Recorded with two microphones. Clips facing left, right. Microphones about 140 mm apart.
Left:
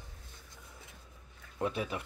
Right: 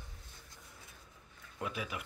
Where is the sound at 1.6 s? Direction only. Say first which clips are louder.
Left 6 dB; 30° left (ahead or behind).